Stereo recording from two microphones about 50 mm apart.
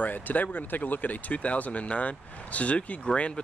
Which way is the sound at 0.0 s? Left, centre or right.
Left.